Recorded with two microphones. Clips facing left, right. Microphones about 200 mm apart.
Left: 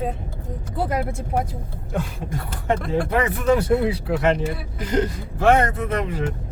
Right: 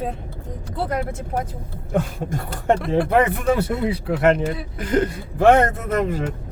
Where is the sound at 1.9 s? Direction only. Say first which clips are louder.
Right 4 dB; 50° right (ahead or behind).